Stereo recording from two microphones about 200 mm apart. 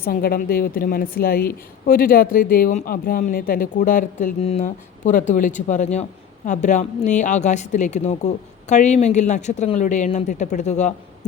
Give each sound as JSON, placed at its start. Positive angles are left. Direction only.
{"t": 0.0, "sound": "a woman's voice", "side_deg": 50}